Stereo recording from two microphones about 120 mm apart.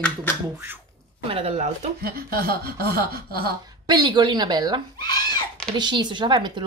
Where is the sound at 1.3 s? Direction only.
50° right (ahead or behind).